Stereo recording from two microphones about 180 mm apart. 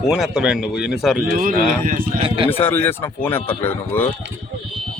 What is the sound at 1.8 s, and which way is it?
Speech, 50° right (ahead or behind).